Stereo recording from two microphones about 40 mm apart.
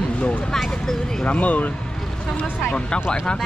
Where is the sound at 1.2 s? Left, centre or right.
Left.